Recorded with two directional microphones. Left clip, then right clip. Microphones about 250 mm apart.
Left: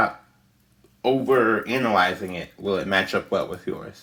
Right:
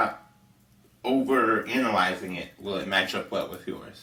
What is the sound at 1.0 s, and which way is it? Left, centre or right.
Speech, left.